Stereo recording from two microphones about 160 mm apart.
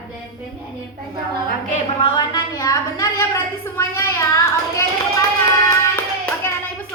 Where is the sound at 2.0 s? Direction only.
25° left (ahead or behind).